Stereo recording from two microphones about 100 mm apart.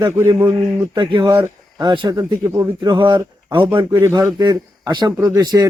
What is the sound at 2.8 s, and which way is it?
Speech, 50° right (ahead or behind).